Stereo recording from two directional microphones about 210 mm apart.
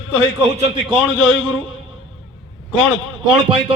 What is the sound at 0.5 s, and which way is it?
Speech, 30° right (ahead or behind).